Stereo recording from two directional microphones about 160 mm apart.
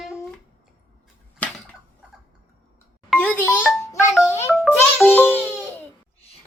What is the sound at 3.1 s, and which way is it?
Music, 10° left (ahead or behind).